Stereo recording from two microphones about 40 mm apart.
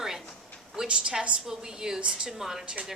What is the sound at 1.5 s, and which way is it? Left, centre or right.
A woman's voice, centre.